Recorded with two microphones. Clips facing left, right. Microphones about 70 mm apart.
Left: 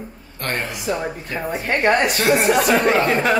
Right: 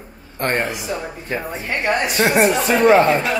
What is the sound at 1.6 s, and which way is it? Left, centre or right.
Speech, left.